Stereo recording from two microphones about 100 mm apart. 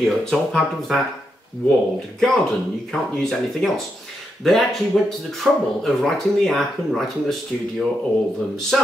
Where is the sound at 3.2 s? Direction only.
5° left (ahead or behind).